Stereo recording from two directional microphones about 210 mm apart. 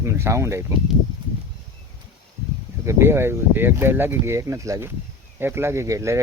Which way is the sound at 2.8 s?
10° right (ahead or behind).